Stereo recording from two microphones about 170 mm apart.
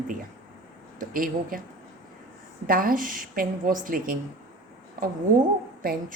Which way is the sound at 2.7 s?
55° right (ahead or behind).